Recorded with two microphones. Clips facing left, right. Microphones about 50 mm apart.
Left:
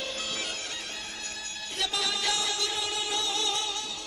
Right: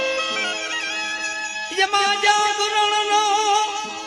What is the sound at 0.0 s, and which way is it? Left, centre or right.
Music, right.